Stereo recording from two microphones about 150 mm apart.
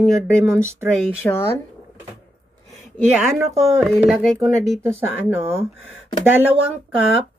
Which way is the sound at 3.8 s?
Centre (ahead or behind).